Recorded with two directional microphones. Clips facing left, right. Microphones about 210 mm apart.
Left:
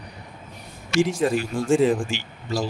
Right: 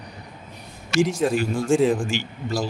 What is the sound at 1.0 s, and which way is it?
Speech, centre (ahead or behind).